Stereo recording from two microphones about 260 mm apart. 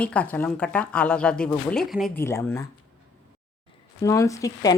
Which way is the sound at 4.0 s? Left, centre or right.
Centre.